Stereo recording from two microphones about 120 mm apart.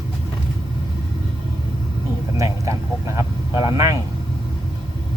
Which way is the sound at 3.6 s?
25° right (ahead or behind).